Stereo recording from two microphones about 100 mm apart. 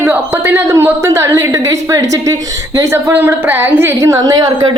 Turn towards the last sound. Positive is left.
turn(degrees=-40)  # may be behind; listen again after turning